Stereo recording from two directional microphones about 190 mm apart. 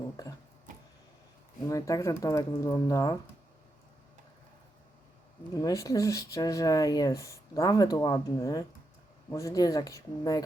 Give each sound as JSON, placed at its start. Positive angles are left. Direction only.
{"t": 1.6, "sound": "speech", "side_deg": 15}
{"t": 5.6, "sound": "speech", "side_deg": 15}